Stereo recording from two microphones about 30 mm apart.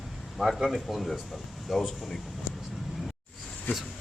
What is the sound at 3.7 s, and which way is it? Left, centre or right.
Speech, left.